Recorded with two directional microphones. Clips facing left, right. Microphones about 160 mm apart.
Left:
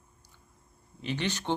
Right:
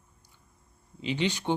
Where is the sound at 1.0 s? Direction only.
15° right (ahead or behind).